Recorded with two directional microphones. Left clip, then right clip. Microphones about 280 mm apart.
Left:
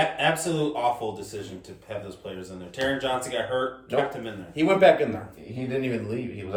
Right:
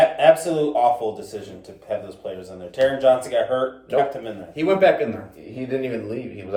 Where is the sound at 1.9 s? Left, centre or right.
Centre.